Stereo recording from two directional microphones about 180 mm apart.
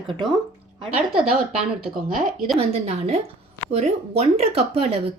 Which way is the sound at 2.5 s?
35° right (ahead or behind).